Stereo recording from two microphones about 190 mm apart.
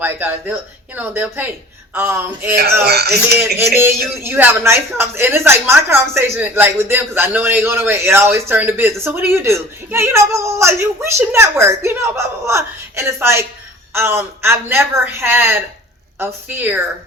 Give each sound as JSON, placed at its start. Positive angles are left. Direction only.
{"t": 0.0, "sound": "a woman's voice", "side_deg": -10}
{"t": 2.8, "sound": "speech", "side_deg": -60}
{"t": 4.2, "sound": "a woman's voice", "side_deg": -10}